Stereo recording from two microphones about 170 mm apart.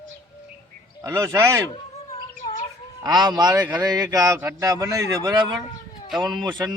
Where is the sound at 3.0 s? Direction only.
25° right (ahead or behind).